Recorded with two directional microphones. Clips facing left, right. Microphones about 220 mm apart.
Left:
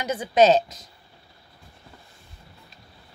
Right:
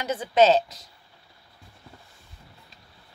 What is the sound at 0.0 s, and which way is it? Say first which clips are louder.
Speech: left 1 dB; 15° left (ahead or behind).